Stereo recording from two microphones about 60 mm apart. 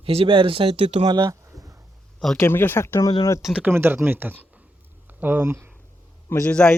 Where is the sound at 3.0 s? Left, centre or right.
Left.